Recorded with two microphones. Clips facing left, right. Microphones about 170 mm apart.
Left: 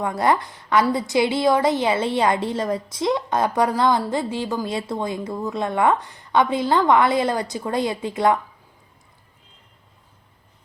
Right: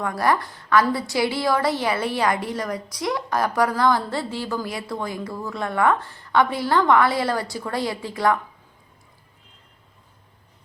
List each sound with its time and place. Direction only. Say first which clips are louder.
0.0 s a woman's voice: left 2 dB; 20° left (ahead or behind)